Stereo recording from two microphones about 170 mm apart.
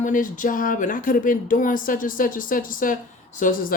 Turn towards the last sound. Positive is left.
turn(degrees=55)  # may be behind; listen again after turning